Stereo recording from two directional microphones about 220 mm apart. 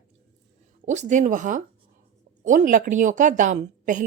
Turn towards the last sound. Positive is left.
turn(degrees=-35)  # may be behind; listen again after turning